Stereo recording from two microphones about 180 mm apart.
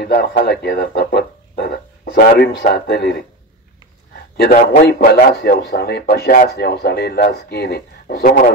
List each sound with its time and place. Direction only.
0.0 s speech: 70° left (ahead or behind)
4.4 s a man's voice: 60° left (ahead or behind)